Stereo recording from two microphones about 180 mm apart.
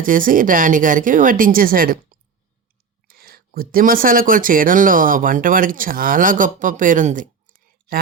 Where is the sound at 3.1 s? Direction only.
60° right (ahead or behind).